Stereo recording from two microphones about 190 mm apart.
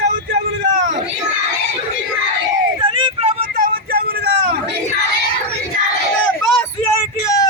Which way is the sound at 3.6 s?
55° right (ahead or behind).